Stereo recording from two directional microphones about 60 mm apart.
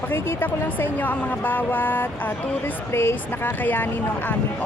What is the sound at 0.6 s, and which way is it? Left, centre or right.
Speech, left.